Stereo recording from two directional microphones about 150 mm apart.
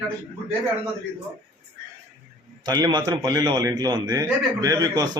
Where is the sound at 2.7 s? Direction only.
30° right (ahead or behind).